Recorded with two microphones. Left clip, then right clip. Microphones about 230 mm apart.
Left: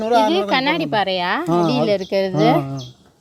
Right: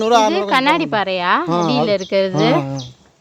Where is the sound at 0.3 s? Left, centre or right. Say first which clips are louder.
Right 3 dB; centre.